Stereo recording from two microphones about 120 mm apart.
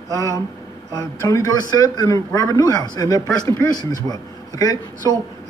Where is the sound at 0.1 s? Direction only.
30° left (ahead or behind).